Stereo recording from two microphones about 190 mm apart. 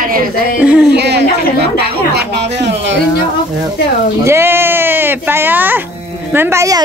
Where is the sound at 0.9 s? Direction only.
60° right (ahead or behind).